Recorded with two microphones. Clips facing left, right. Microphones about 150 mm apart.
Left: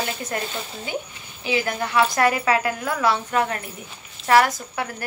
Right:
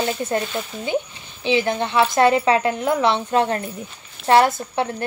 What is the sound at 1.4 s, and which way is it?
Speech, 25° right (ahead or behind).